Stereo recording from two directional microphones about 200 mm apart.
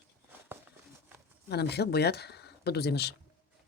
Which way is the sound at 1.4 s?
55° left (ahead or behind).